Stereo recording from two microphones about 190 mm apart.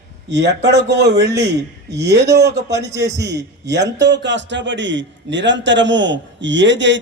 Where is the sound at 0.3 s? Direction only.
65° right (ahead or behind).